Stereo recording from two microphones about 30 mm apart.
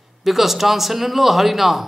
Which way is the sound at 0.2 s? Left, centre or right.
Centre.